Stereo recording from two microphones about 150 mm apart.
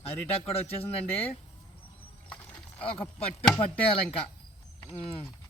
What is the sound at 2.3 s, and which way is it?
Speech, 5° left (ahead or behind).